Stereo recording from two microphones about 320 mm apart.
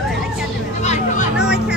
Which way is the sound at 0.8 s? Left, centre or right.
Left.